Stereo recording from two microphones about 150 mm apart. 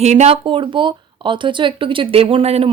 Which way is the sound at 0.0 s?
50° right (ahead or behind).